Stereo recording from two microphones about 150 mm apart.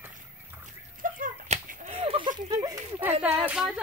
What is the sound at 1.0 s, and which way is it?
Whip, 65° right (ahead or behind).